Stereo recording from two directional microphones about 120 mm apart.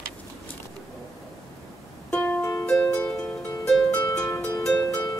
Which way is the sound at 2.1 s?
15° left (ahead or behind).